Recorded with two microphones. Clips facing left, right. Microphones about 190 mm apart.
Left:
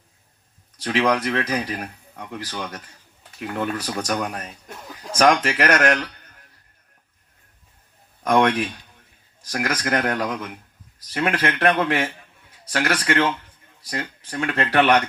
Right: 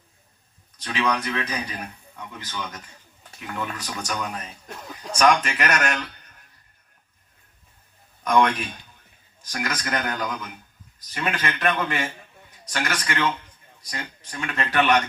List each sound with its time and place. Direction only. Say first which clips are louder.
0.9 s speech: left 5 dB; 75° left (ahead or behind)
3.9 s a man's voice: left 5 dB; 70° left (ahead or behind)
8.2 s a man's voice: left 2 dB; 80° left